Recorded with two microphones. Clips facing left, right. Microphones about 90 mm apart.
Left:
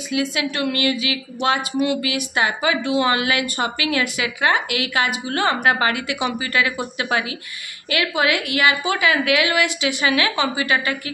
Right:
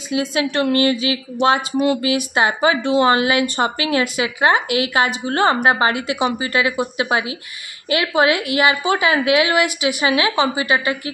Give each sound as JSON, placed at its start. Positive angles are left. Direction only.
{"t": 0.1, "sound": "a woman's voice", "side_deg": -25}